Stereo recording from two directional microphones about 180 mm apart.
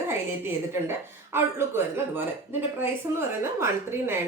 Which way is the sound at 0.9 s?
15° right (ahead or behind).